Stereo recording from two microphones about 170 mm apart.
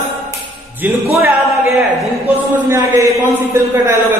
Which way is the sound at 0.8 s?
10° right (ahead or behind).